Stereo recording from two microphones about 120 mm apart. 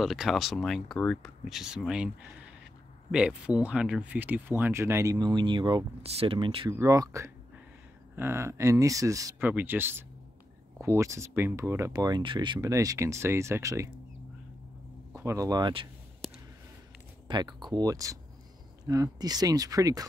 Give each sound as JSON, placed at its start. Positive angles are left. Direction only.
{"t": 0.0, "sound": "speech", "side_deg": 0}
{"t": 6.0, "sound": "speech", "side_deg": -55}
{"t": 6.7, "sound": "speech", "side_deg": -25}
{"t": 9.4, "sound": "speech", "side_deg": -15}
{"t": 12.2, "sound": "speech", "side_deg": -40}
{"t": 12.5, "sound": "speech", "side_deg": -30}
{"t": 15.1, "sound": "speech", "side_deg": -25}
{"t": 17.3, "sound": "speech", "side_deg": -40}